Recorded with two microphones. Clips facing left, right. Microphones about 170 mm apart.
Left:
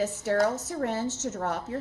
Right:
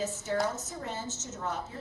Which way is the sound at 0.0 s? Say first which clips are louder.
Left 6 dB; 65° left (ahead or behind).